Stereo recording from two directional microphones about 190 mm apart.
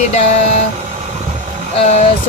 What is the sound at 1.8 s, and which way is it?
Speech, 35° left (ahead or behind).